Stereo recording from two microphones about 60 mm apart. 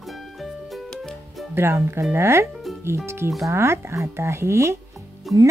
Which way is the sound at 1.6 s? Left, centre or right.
Right.